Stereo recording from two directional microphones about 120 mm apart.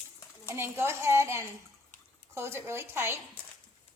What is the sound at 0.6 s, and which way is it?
Speech, 20° right (ahead or behind).